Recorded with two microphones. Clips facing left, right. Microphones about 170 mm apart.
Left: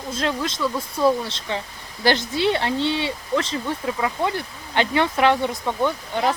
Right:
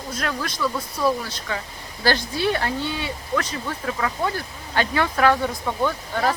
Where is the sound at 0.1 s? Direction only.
25° left (ahead or behind).